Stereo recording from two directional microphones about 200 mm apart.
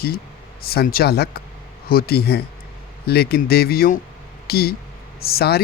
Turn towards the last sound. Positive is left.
turn(degrees=50)  # may be behind; listen again after turning